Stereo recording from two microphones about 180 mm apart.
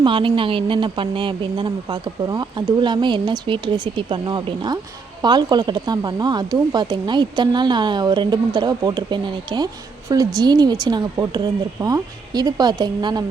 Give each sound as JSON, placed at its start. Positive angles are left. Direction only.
{"t": 0.0, "sound": "speech", "side_deg": -30}